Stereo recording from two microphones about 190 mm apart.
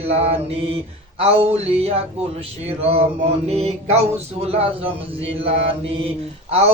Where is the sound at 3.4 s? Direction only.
35° right (ahead or behind).